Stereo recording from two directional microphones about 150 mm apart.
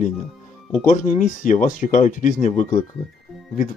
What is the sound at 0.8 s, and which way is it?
Speech, 60° left (ahead or behind).